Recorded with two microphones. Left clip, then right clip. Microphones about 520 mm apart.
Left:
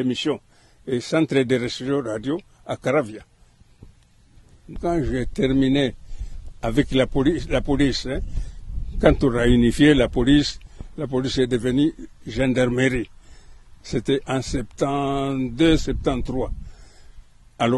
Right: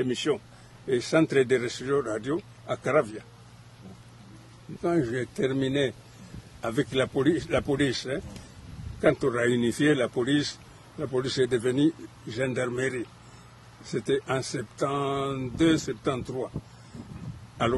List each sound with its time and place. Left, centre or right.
0.0 s speech: left
4.8 s speech: left
13.9 s speech: left